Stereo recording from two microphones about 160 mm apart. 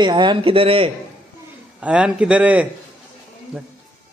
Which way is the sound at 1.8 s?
5° right (ahead or behind).